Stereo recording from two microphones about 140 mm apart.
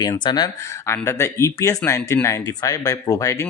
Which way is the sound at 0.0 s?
30° left (ahead or behind).